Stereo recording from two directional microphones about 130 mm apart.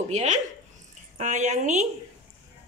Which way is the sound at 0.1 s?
65° right (ahead or behind).